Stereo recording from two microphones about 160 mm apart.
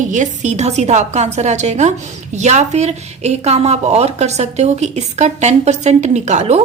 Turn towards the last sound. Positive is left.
turn(degrees=-40)  # may be behind; listen again after turning